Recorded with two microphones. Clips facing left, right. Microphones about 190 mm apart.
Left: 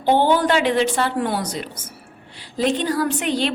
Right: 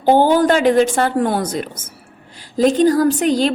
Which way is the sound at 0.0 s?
45° right (ahead or behind).